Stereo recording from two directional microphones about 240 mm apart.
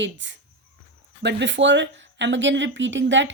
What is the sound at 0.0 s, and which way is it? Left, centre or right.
A woman's voice, right.